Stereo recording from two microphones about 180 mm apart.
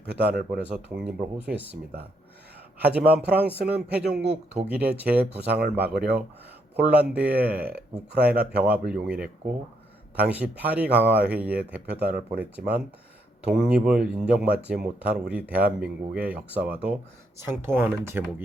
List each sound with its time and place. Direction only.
0.3 s speech: 60° right (ahead or behind)
1.0 s speech: 5° right (ahead or behind)